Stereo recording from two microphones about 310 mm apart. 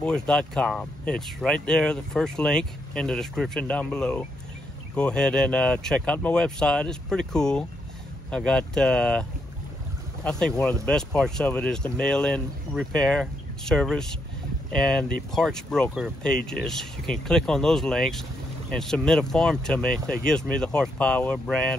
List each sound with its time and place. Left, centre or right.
0.0 s speech: centre
10.2 s speech: centre